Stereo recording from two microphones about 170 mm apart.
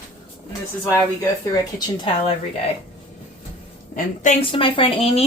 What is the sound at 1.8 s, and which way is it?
Speech, 30° left (ahead or behind).